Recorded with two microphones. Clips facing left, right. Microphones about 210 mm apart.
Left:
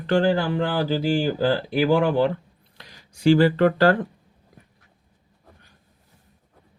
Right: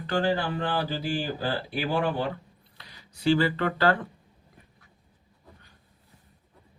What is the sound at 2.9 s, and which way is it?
Speech, 45° left (ahead or behind).